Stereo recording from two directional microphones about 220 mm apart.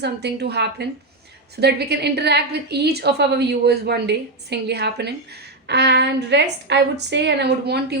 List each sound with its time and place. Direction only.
0.0 s a woman's voice: 50° right (ahead or behind)